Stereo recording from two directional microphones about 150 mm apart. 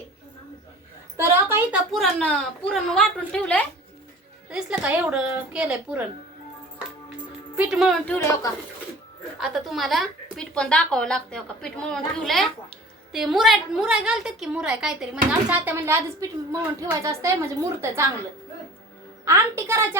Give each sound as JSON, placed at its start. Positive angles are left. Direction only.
{"t": 1.1, "sound": "a sound", "side_deg": -15}
{"t": 1.9, "sound": "speech", "side_deg": 5}
{"t": 4.4, "sound": "a woman's voice", "side_deg": -5}
{"t": 7.5, "sound": "speech", "side_deg": -5}
{"t": 8.0, "sound": "a woman's voice", "side_deg": 15}
{"t": 9.4, "sound": "a woman's voice", "side_deg": 0}
{"t": 19.2, "sound": "a woman's voice", "side_deg": -20}